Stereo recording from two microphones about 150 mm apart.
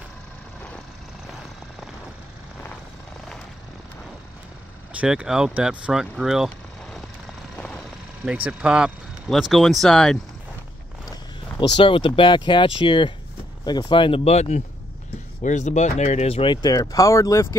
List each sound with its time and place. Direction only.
4.9 s speech: 5° right (ahead or behind)
7.5 s vehicle: 5° left (ahead or behind)
8.5 s speech: 5° right (ahead or behind)
11.7 s speech: 30° left (ahead or behind)
16.6 s speech: 25° left (ahead or behind)